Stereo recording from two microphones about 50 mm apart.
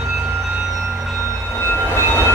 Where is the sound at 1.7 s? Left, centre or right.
Left.